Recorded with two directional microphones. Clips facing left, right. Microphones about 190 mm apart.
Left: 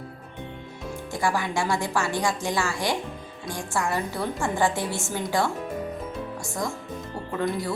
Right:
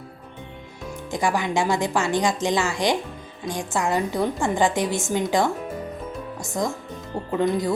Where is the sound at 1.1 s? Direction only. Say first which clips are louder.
Right 3 dB; 20° right (ahead or behind).